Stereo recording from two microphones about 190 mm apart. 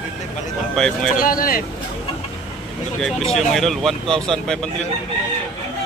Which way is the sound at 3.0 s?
Centre (ahead or behind).